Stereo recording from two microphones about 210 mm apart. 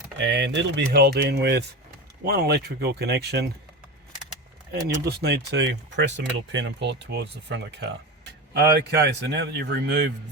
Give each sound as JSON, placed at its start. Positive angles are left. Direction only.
{"t": 0.2, "sound": "a man's voice", "side_deg": -55}
{"t": 5.0, "sound": "a man's voice", "side_deg": -50}